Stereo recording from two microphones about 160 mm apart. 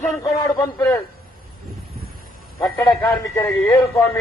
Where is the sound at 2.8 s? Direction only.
15° left (ahead or behind).